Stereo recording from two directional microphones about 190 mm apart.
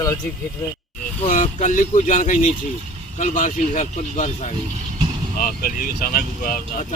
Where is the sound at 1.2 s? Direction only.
45° left (ahead or behind).